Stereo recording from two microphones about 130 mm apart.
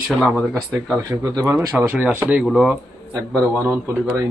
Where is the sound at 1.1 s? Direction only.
25° right (ahead or behind); by 2.8 s 5° right (ahead or behind).